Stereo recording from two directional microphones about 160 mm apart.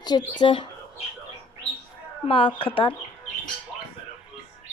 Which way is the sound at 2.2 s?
35° left (ahead or behind).